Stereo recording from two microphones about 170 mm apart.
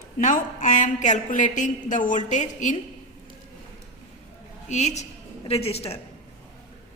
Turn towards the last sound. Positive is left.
turn(degrees=35)  # may be behind; listen again after turning